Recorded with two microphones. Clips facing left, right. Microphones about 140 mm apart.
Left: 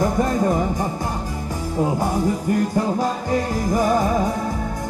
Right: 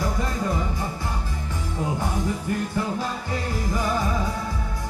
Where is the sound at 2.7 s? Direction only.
45° left (ahead or behind).